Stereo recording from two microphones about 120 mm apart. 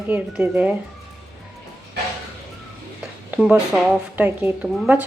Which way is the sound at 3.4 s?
5° right (ahead or behind).